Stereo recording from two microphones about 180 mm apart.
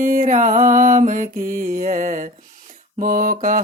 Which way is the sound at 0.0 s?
50° right (ahead or behind).